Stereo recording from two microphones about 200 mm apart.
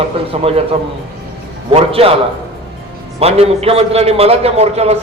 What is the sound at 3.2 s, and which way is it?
A man's voice, 30° right (ahead or behind).